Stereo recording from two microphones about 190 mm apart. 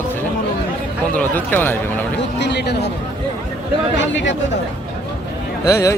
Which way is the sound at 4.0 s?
70° left (ahead or behind).